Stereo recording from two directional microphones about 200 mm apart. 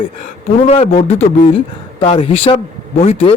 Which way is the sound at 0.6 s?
30° left (ahead or behind).